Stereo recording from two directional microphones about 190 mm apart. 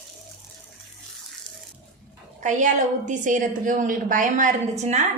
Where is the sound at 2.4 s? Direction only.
40° right (ahead or behind).